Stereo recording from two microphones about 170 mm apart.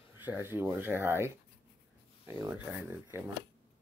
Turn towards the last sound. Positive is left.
turn(degrees=-10)  # may be behind; listen again after turning